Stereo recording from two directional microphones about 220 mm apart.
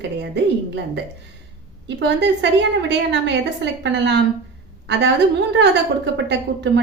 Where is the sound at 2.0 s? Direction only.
50° right (ahead or behind).